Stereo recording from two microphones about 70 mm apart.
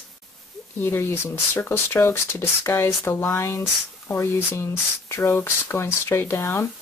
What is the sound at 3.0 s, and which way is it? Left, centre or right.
Speech, left.